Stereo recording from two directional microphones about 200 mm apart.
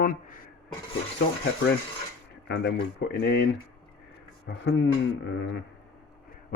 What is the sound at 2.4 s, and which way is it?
Speech, 55° left (ahead or behind).